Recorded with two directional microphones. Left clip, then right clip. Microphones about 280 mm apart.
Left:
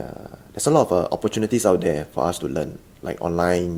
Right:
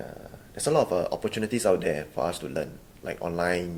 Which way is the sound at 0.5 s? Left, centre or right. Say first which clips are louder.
Left 6 dB; left.